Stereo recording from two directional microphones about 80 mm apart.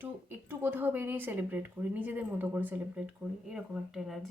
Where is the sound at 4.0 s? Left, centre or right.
Centre.